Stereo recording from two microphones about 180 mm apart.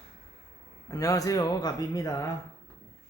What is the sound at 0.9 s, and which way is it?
Speech, 20° left (ahead or behind).